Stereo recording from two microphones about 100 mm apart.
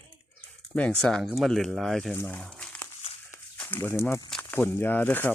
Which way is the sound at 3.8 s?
25° left (ahead or behind).